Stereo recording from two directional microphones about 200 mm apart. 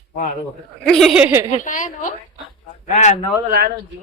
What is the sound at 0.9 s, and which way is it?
Speech, centre (ahead or behind).